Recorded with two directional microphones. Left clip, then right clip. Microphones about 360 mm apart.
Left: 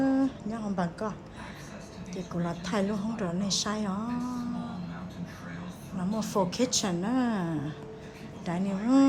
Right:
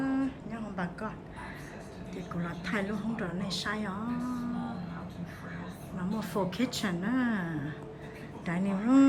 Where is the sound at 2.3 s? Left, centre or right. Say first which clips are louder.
Left 3 dB; centre.